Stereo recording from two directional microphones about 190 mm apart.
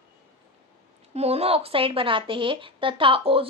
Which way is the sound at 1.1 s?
35° right (ahead or behind).